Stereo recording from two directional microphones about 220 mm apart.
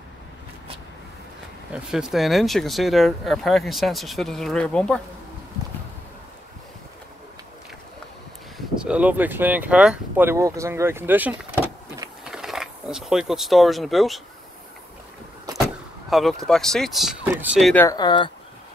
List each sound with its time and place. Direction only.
1.7 s speech: 5° right (ahead or behind)
8.5 s speech: 5° right (ahead or behind)
15.5 s vehicle: 15° right (ahead or behind)
16.1 s speech: centre (ahead or behind)
17.8 s speech: 20° left (ahead or behind)